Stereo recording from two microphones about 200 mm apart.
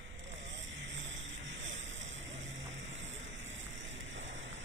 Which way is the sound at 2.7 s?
70° right (ahead or behind).